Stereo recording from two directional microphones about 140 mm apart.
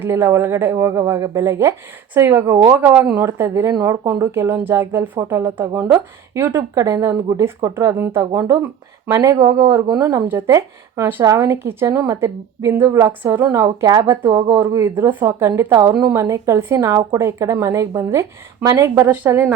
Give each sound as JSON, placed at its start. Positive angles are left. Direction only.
{"t": 0.0, "sound": "speech", "side_deg": -15}